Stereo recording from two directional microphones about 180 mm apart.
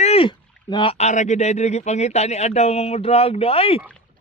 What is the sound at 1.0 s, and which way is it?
Speech, 40° left (ahead or behind).